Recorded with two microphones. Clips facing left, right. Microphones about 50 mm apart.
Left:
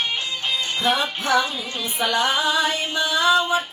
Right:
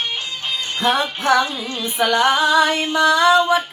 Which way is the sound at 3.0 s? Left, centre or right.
Right.